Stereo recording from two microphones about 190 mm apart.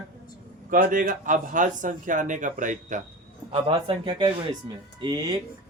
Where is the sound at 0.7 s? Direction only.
45° right (ahead or behind).